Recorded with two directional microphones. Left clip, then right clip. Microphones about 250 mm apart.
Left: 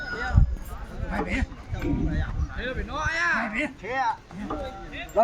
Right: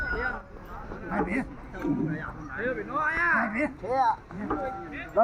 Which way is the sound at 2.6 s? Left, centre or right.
Left.